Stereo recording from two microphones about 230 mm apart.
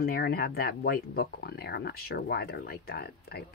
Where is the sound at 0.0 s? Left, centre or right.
Left.